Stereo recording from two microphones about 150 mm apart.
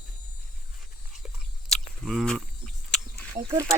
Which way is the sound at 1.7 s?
Centre (ahead or behind).